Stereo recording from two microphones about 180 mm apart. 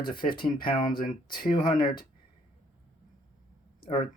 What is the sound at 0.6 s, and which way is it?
Speech, 50° left (ahead or behind).